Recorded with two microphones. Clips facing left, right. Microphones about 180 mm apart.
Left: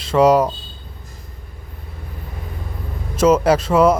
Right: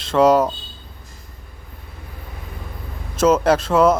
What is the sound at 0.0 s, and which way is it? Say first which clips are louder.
Speech: left 1 dB; 5° left (ahead or behind).